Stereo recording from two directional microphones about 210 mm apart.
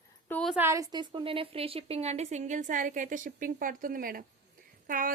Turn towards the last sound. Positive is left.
turn(degrees=-40)  # may be behind; listen again after turning